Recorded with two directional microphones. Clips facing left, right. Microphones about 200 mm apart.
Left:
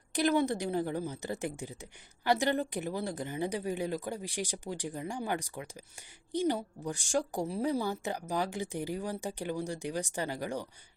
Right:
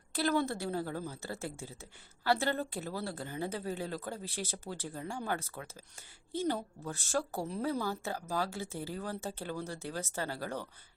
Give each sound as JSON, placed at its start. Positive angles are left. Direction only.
{"t": 0.1, "sound": "a woman's voice", "side_deg": 15}